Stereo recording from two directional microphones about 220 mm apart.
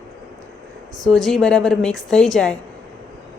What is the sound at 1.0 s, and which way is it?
A woman's voice, centre (ahead or behind).